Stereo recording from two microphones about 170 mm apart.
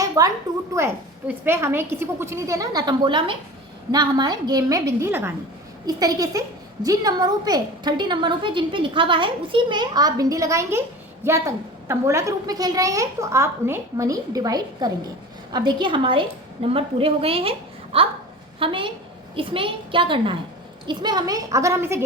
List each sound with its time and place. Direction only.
0.0 s a woman's voice: 20° right (ahead or behind)